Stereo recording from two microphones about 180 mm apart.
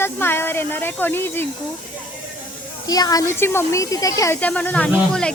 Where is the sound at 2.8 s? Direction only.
20° left (ahead or behind).